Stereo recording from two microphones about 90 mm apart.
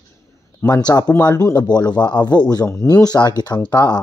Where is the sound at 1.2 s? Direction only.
45° left (ahead or behind).